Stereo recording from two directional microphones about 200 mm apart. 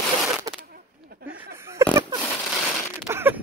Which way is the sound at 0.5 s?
15° right (ahead or behind).